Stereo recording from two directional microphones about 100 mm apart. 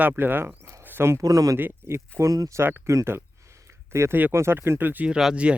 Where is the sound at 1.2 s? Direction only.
35° right (ahead or behind).